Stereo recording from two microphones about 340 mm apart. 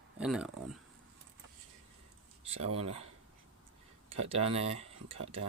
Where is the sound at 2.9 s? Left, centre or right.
Centre.